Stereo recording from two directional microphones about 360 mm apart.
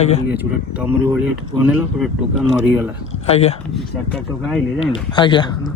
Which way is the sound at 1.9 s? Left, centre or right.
Centre.